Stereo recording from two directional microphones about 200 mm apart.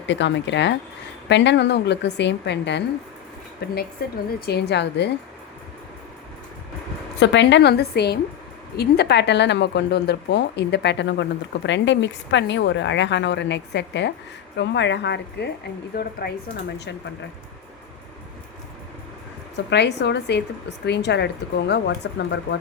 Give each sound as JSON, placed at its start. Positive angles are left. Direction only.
{"t": 0.1, "sound": "a woman's voice", "side_deg": 65}
{"t": 7.2, "sound": "a woman's voice", "side_deg": 60}
{"t": 19.7, "sound": "speech", "side_deg": 60}